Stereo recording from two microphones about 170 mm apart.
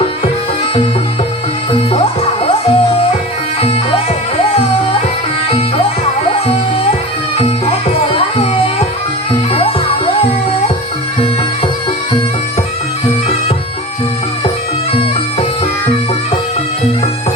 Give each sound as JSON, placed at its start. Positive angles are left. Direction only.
{"t": 1.9, "sound": "music", "side_deg": 35}
{"t": 5.5, "sound": "music", "side_deg": 35}
{"t": 7.3, "sound": "music", "side_deg": 35}